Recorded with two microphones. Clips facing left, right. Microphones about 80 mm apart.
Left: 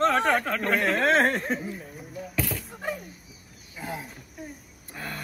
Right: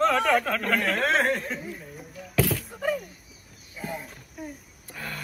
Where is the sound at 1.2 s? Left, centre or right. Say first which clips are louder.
Left 2 dB; left.